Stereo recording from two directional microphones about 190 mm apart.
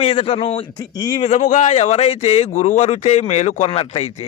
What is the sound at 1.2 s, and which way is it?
A man's voice, 35° left (ahead or behind).